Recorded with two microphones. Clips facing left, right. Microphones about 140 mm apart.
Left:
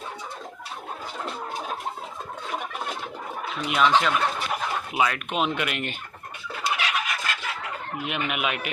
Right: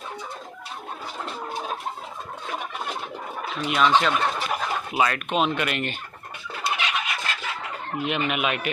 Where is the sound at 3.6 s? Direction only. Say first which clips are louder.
Right 1 dB; 10° left (ahead or behind).